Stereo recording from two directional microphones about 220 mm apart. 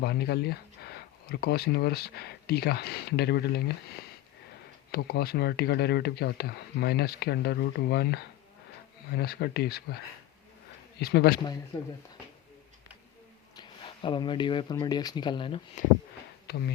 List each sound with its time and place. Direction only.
0.0 s speech: 45° left (ahead or behind)
11.0 s speech: 45° left (ahead or behind)
13.6 s speech: 20° left (ahead or behind)
16.5 s speech: 45° left (ahead or behind)